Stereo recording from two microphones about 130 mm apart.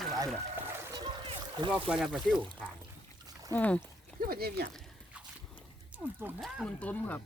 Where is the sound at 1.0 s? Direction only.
40° right (ahead or behind).